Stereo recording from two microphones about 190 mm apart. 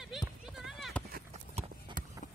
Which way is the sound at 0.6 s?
Centre (ahead or behind).